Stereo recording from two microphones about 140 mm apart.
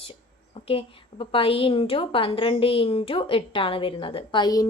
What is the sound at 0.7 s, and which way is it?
A woman's voice, 40° left (ahead or behind).